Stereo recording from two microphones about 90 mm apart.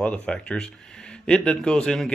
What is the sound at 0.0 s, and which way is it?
Speech, 15° left (ahead or behind).